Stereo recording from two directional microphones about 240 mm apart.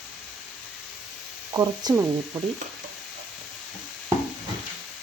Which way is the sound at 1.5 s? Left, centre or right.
Centre.